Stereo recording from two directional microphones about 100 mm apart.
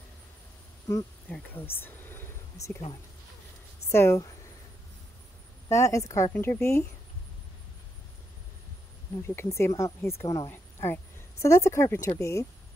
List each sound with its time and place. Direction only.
1.5 s a sound: 20° left (ahead or behind)
3.9 s speech: 25° left (ahead or behind)
5.7 s speech: 30° left (ahead or behind)
9.2 s a woman's voice: 25° left (ahead or behind)
10.5 s a woman's voice: 20° left (ahead or behind)